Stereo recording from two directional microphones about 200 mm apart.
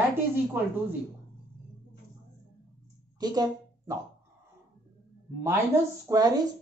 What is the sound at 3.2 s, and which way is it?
Speech, 20° right (ahead or behind).